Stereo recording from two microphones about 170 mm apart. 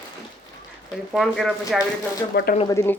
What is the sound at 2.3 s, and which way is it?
Speech, 70° left (ahead or behind).